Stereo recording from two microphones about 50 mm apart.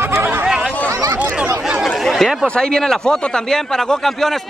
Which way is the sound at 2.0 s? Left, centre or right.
Centre.